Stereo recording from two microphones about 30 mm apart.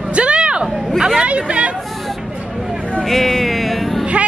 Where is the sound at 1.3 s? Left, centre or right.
Right.